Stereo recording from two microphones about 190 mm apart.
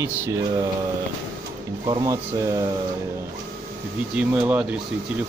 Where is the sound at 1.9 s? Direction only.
20° right (ahead or behind).